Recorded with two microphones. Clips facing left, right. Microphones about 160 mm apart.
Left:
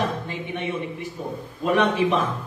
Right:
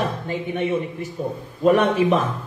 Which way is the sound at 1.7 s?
45° right (ahead or behind).